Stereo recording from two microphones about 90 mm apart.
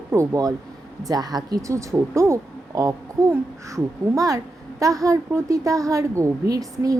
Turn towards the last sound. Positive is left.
turn(degrees=-40)  # may be behind; listen again after turning